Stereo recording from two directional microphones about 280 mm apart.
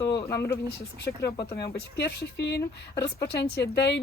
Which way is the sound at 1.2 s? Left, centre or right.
Centre.